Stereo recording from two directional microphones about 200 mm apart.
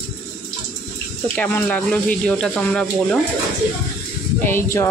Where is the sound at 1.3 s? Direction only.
5° left (ahead or behind).